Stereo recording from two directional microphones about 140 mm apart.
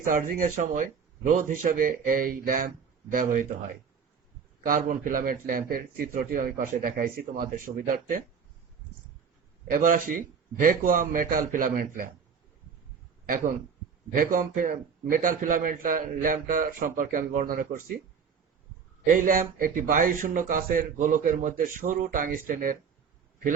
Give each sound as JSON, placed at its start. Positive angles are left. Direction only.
{"t": 0.0, "sound": "a man's voice", "side_deg": -75}
{"t": 9.6, "sound": "a man's voice", "side_deg": -80}
{"t": 13.2, "sound": "a man's voice", "side_deg": -80}
{"t": 19.0, "sound": "a man's voice", "side_deg": -80}